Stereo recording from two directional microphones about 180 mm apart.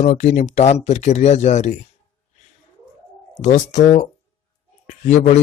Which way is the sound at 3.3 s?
40° left (ahead or behind).